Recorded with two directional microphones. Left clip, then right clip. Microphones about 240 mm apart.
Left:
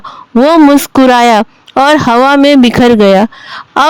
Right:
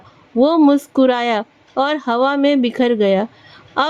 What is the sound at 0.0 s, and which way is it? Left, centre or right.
A woman's voice, left.